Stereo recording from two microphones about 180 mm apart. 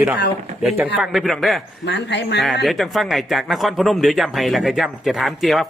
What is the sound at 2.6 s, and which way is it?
Speech, centre (ahead or behind).